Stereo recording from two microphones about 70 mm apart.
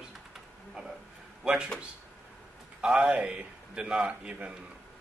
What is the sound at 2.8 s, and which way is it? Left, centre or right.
Speech, centre.